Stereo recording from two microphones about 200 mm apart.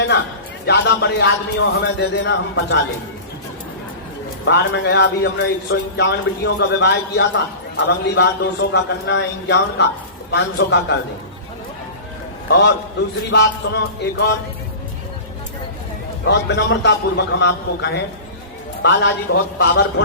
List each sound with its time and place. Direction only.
0.6 s a man's voice: 60° left (ahead or behind)
4.4 s a man's voice: 60° left (ahead or behind)
12.5 s a man's voice: 60° left (ahead or behind)
16.2 s a man's voice: 60° left (ahead or behind)